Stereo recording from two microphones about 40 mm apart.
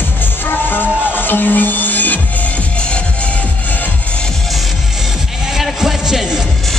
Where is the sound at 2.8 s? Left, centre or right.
Left.